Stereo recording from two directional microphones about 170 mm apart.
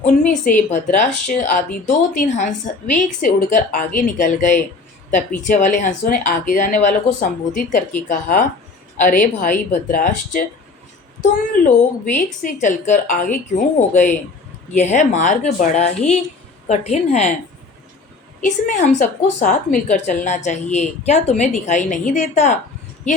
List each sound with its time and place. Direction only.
0.0 s a woman's voice: 50° left (ahead or behind)
12.1 s a woman's voice: 50° left (ahead or behind)
18.3 s a woman's voice: 50° left (ahead or behind)